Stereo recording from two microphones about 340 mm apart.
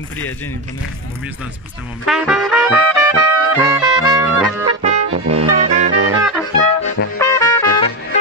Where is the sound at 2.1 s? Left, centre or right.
Centre.